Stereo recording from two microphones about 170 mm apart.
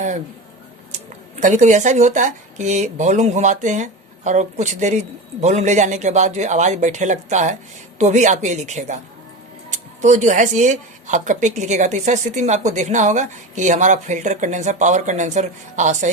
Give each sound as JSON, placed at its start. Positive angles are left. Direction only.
{"t": 0.9, "sound": "speech", "side_deg": -45}